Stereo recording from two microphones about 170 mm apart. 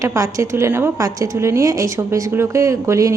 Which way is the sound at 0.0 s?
20° right (ahead or behind).